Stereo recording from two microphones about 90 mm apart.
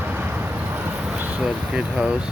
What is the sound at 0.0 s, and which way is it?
Vehicle, 20° right (ahead or behind).